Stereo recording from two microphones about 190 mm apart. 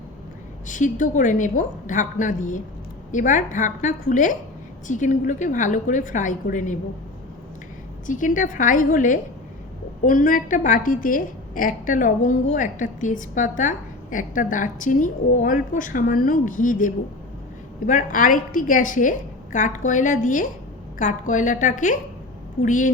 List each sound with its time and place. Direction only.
0.7 s a woman's voice: 40° left (ahead or behind)
8.0 s a woman's voice: 45° left (ahead or behind)